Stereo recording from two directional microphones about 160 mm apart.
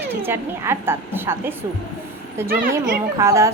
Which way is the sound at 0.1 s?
15° right (ahead or behind).